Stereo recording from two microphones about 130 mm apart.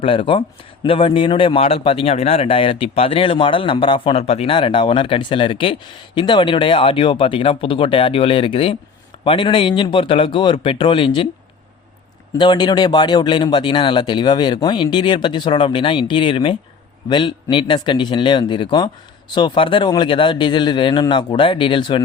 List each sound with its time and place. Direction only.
0.0 s speech: 45° left (ahead or behind)
12.4 s speech: 35° left (ahead or behind)